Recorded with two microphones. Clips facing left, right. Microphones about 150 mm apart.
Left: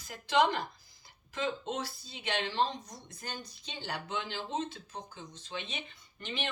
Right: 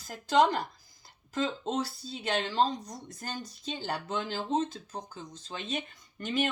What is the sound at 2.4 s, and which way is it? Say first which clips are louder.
Speech: right 3 dB; 45° right (ahead or behind).